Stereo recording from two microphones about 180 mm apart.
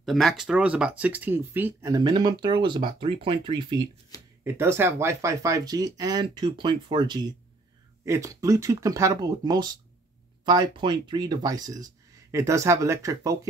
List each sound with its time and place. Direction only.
0.0 s speech: centre (ahead or behind); by 3.9 s 25° right (ahead or behind)
4.1 s a sound: 20° left (ahead or behind)
4.5 s speech: 15° right (ahead or behind)